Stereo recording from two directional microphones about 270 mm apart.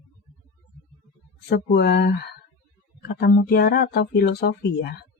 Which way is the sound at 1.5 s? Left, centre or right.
Left.